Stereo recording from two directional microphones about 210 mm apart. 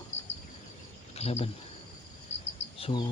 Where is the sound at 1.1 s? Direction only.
30° left (ahead or behind).